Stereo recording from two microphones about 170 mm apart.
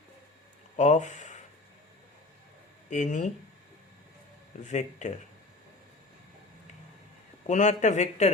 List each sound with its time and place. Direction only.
0.8 s speech: 45° left (ahead or behind)
2.9 s speech: 45° left (ahead or behind)
4.6 s speech: 45° left (ahead or behind)
7.4 s speech: 45° left (ahead or behind)